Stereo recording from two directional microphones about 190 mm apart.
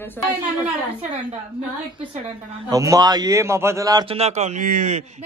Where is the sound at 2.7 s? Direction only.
20° right (ahead or behind).